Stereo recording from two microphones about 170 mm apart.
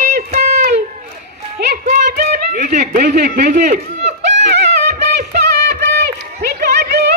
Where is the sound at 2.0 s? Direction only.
65° right (ahead or behind).